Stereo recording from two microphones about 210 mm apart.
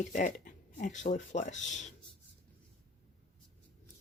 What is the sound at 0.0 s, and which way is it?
Speech, 35° left (ahead or behind).